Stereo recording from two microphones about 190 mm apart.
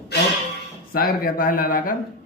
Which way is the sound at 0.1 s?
60° left (ahead or behind).